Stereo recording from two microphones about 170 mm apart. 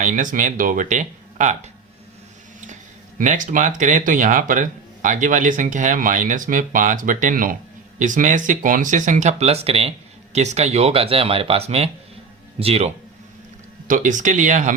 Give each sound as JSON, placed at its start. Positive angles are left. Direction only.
{"t": 0.0, "sound": "speech", "side_deg": -50}
{"t": 3.2, "sound": "speech", "side_deg": -50}
{"t": 13.8, "sound": "speech", "side_deg": -50}